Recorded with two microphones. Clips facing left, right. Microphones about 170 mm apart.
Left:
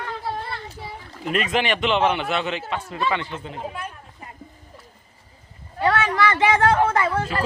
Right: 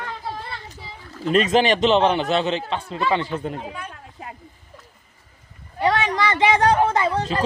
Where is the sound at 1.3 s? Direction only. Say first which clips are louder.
Right 5 dB; 35° right (ahead or behind).